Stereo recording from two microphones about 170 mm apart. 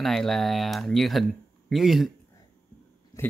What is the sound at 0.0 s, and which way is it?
Speech, centre (ahead or behind).